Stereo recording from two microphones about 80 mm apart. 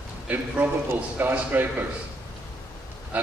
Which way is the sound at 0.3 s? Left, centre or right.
Centre.